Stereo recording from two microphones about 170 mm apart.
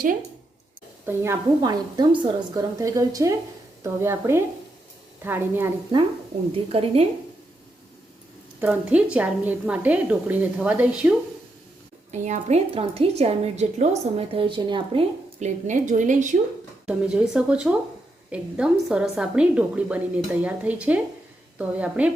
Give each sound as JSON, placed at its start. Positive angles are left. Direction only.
{"t": 1.0, "sound": "a woman's voice", "side_deg": -15}
{"t": 6.7, "sound": "a woman's voice", "side_deg": -35}
{"t": 8.6, "sound": "a woman's voice", "side_deg": -5}
{"t": 12.1, "sound": "a woman's voice", "side_deg": -45}
{"t": 15.4, "sound": "a woman's voice", "side_deg": -45}
{"t": 16.8, "sound": "a woman's voice", "side_deg": -5}